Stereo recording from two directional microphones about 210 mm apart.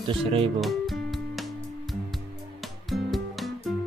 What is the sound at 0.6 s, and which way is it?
Music, centre (ahead or behind).